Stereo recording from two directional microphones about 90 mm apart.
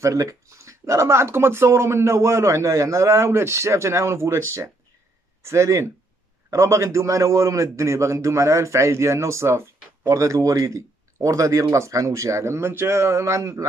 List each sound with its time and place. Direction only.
0.0 s speech: 35° right (ahead or behind)